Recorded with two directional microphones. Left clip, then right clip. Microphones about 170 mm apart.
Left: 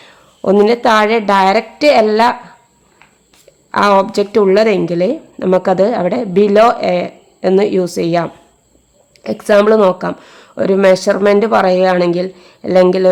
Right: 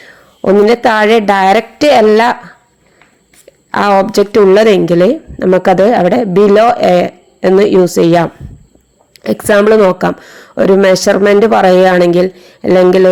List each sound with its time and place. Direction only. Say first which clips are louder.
0.0 s a sound: right 3 dB; 20° right (ahead or behind)
0.7 s speech: right 3 dB; 20° right (ahead or behind)
3.7 s speech: right 1 dB; 25° right (ahead or behind)